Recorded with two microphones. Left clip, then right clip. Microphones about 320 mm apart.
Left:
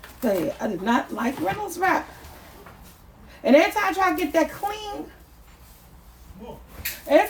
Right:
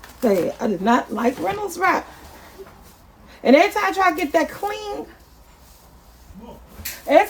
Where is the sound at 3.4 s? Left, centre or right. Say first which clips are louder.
Right 3 dB; right.